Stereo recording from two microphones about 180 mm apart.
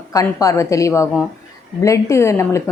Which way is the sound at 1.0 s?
5° right (ahead or behind).